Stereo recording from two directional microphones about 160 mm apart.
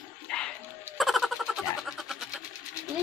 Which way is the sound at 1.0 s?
Centre (ahead or behind).